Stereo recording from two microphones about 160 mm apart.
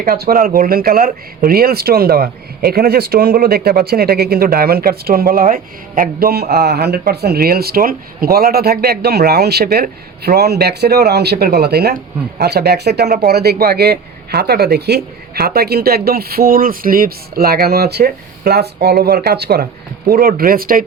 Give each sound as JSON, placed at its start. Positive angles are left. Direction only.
{"t": 0.0, "sound": "speech", "side_deg": -70}
{"t": 20.1, "sound": "speech", "side_deg": -65}